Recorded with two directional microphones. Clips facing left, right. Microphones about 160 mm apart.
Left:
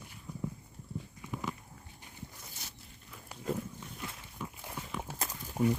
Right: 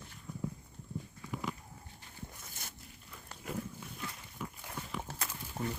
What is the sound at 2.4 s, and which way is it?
Zipper, 50° right (ahead or behind).